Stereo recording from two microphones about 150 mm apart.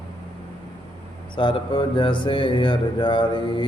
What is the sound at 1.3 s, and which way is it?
Speech, 35° left (ahead or behind).